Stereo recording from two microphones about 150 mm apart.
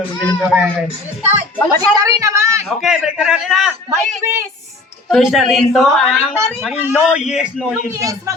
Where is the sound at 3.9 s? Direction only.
15° right (ahead or behind).